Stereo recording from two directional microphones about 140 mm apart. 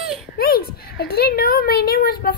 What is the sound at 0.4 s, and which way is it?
A child's voice, 90° left.